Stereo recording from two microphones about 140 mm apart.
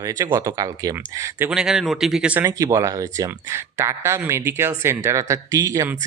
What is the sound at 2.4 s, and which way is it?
Speech, 25° right (ahead or behind).